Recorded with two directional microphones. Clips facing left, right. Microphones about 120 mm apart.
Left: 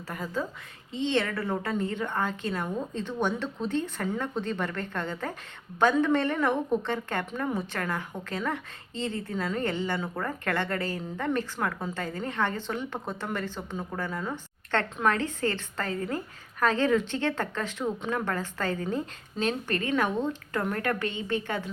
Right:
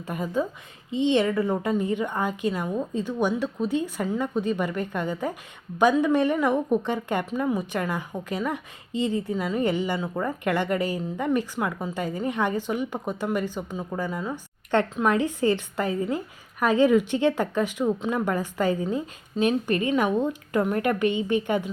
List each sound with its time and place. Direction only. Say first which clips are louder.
0.1 s a woman's voice: right 6 dB; 20° right (ahead or behind)